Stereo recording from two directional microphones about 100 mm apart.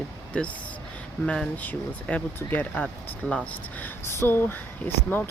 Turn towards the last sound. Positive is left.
turn(degrees=20)  # may be behind; listen again after turning